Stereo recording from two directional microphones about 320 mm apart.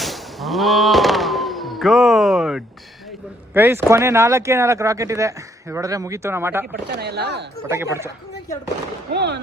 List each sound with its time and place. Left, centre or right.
0.0 s music: centre
3.5 s speech: centre
6.8 s speech: right
7.7 s speech: centre
9.1 s speech: right